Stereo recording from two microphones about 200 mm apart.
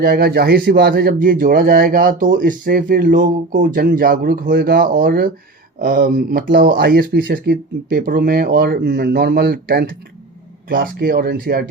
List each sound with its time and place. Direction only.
0.0 s speech: 50° right (ahead or behind)